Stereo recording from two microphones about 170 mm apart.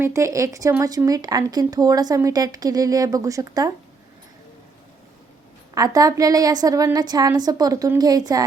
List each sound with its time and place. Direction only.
0.0 s speech: 15° right (ahead or behind)
5.7 s speech: 20° right (ahead or behind)